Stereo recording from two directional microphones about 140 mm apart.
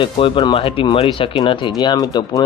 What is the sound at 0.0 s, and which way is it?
Speech, 35° left (ahead or behind).